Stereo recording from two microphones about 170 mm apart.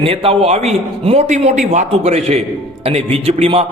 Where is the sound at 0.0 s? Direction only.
35° right (ahead or behind).